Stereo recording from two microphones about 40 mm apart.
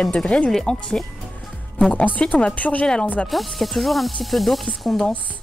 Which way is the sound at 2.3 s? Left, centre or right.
Left.